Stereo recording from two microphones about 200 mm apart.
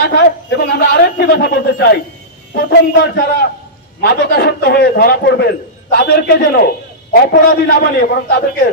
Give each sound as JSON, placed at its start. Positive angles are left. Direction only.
{"t": 0.0, "sound": "a man's voice", "side_deg": 55}